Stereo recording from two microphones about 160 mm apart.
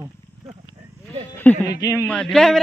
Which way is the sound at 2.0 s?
5° left (ahead or behind).